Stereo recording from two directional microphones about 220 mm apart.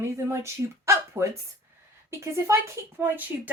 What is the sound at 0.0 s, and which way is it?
Speech, 10° right (ahead or behind).